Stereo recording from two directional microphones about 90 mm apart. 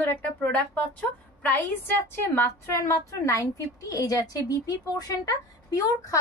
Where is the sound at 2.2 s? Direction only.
30° left (ahead or behind).